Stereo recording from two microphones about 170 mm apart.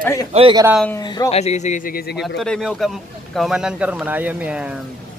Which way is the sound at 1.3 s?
40° left (ahead or behind).